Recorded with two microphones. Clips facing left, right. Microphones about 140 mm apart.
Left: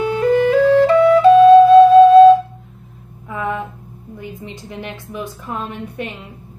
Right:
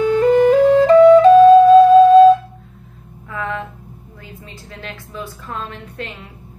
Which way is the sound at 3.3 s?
15° left (ahead or behind).